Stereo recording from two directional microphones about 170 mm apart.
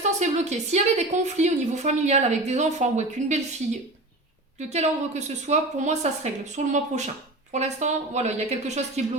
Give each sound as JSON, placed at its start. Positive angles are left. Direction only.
{"t": 0.2, "sound": "a woman's voice", "side_deg": -40}
{"t": 4.7, "sound": "a woman's voice", "side_deg": -40}